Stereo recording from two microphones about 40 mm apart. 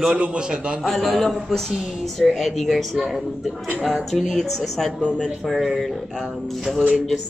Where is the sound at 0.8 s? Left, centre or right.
Centre.